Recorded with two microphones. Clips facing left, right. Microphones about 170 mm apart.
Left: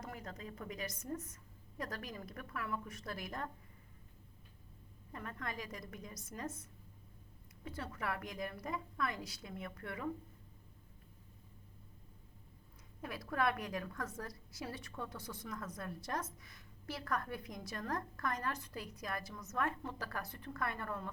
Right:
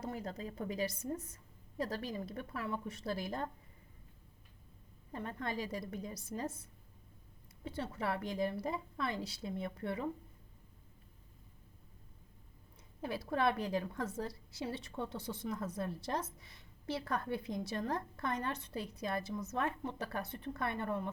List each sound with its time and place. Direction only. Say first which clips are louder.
0.0 s a woman's voice: right 6 dB; 30° right (ahead or behind)
5.1 s a woman's voice: right 5 dB; 30° right (ahead or behind)
13.0 s a woman's voice: right 3 dB; 30° right (ahead or behind)